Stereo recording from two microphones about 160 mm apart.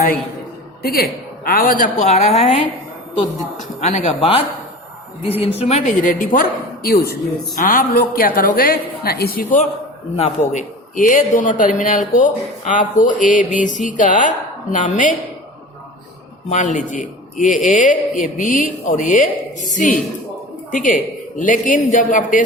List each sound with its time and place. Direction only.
0.8 s a woman's voice: 70° left (ahead or behind)
2.0 s a woman's voice: 40° left (ahead or behind)
3.8 s a woman's voice: 45° left (ahead or behind)
6.0 s a woman's voice: 55° left (ahead or behind)
10.2 s a man's voice: 45° left (ahead or behind)
16.5 s a man's voice: 50° left (ahead or behind)